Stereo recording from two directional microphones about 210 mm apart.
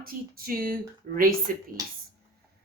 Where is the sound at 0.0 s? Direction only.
45° right (ahead or behind).